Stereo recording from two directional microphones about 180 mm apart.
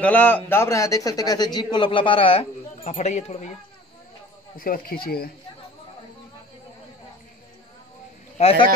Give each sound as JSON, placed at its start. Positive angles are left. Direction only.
{"t": 0.0, "sound": "a man's voice", "side_deg": 10}
{"t": 4.6, "sound": "speech", "side_deg": 55}
{"t": 8.4, "sound": "a man's voice", "side_deg": 35}